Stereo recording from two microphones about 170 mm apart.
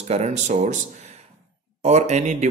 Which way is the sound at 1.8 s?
40° right (ahead or behind).